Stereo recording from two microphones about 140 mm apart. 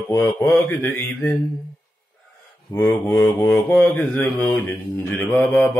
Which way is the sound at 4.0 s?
10° left (ahead or behind).